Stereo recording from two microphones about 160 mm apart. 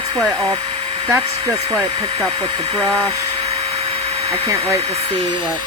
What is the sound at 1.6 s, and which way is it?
Speech, 30° right (ahead or behind).